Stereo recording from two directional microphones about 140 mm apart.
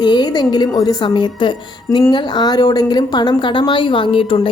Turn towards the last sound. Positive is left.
turn(degrees=40)  # may be behind; listen again after turning